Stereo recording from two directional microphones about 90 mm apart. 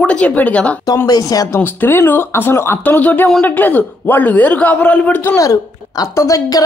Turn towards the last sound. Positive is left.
turn(degrees=40)  # may be behind; listen again after turning